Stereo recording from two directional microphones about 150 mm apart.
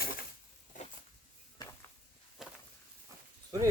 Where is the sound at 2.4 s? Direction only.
Centre (ahead or behind).